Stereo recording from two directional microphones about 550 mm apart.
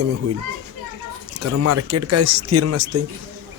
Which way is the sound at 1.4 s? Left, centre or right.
Right.